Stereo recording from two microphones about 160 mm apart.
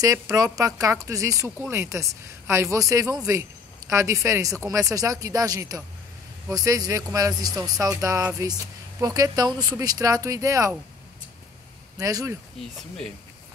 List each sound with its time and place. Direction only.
0.0 s speech: 20° right (ahead or behind)
12.0 s speech: 20° right (ahead or behind)